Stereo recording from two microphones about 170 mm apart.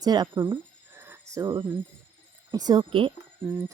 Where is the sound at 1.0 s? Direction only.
15° right (ahead or behind).